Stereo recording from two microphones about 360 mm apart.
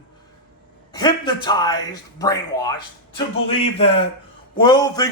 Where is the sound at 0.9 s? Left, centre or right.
Centre.